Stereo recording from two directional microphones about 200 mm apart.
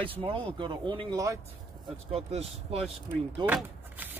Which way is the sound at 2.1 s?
30° right (ahead or behind).